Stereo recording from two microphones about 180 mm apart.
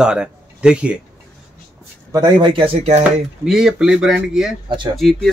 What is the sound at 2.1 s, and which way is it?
Speech, 25° right (ahead or behind).